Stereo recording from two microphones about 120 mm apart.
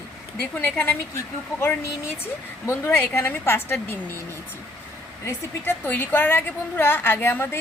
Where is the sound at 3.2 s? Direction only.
20° left (ahead or behind).